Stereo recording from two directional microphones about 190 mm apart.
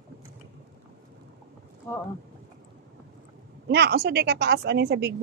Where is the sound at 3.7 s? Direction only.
60° right (ahead or behind).